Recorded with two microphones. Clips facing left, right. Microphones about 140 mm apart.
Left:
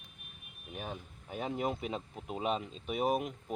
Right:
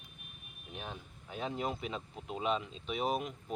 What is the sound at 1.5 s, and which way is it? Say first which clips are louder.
Speech: left 4 dB; 5° left (ahead or behind).